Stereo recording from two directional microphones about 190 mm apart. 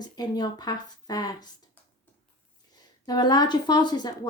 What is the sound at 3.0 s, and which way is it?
Speech, 20° left (ahead or behind).